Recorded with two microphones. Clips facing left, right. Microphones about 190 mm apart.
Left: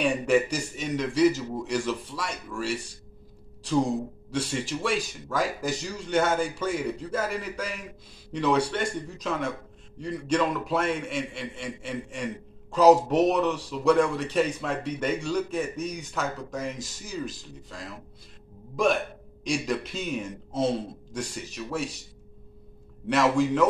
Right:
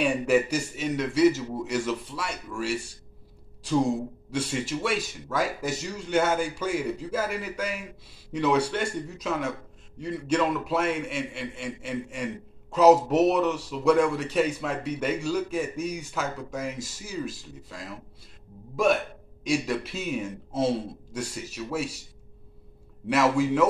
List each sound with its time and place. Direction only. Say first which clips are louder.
0.0 s a man's voice: even; 5° right (ahead or behind)
23.0 s a man's voice: even; 5° right (ahead or behind)